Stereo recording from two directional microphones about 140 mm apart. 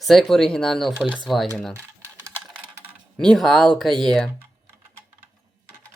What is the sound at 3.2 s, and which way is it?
Speech, 5° left (ahead or behind).